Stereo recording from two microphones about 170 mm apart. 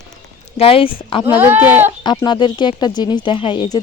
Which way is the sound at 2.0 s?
25° left (ahead or behind).